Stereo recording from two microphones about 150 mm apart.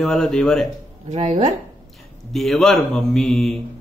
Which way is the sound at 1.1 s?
45° right (ahead or behind).